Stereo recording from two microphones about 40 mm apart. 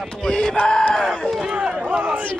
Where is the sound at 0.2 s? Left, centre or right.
Centre.